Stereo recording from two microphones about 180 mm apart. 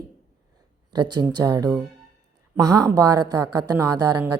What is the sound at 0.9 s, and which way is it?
A woman's voice, 20° right (ahead or behind).